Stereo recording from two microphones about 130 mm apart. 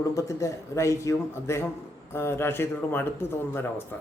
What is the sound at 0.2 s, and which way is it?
Speech, 25° left (ahead or behind).